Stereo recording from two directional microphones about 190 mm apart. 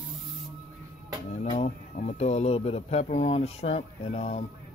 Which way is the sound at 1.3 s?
35° left (ahead or behind).